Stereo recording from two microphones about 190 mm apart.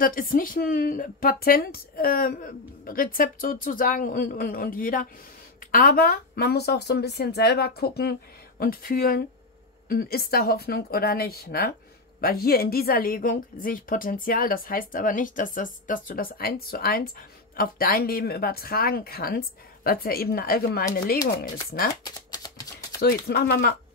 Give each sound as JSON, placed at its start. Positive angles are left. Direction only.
{"t": 0.0, "sound": "a woman's voice", "side_deg": 45}
{"t": 22.0, "sound": "a sound", "side_deg": 20}
{"t": 22.9, "sound": "speech", "side_deg": 55}